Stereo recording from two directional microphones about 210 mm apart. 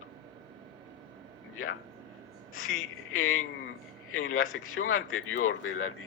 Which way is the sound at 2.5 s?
85° left.